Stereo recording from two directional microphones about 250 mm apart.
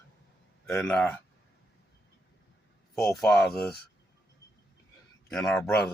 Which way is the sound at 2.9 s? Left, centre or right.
Centre.